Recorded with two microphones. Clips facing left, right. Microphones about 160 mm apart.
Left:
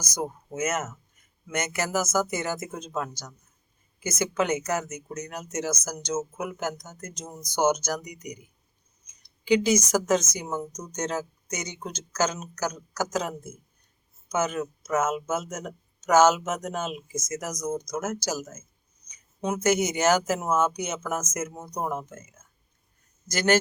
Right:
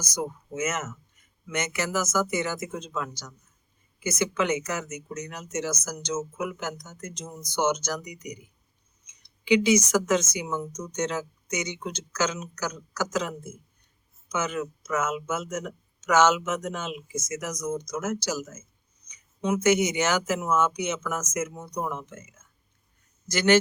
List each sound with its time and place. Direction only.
0.0 s speech: 45° left (ahead or behind)
23.3 s speech: 45° left (ahead or behind)